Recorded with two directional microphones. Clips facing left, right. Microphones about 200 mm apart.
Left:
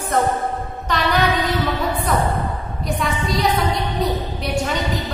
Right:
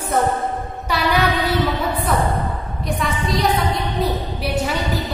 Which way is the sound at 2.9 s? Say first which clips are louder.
Even; centre (ahead or behind).